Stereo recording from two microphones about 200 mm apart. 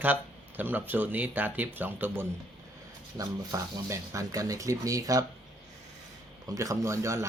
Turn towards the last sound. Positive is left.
turn(degrees=-15)  # may be behind; listen again after turning